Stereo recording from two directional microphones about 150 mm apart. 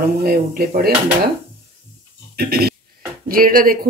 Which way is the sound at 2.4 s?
90° right.